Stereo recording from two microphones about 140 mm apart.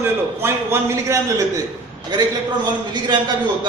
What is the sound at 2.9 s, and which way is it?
Speech, 30° right (ahead or behind).